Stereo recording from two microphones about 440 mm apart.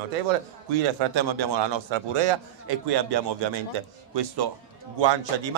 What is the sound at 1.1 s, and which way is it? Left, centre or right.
Speech, right.